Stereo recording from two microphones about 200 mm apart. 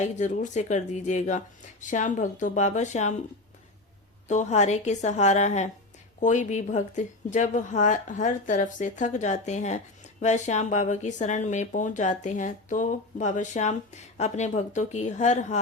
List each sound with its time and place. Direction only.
0.0 s speech: 35° left (ahead or behind)
4.3 s speech: 35° left (ahead or behind)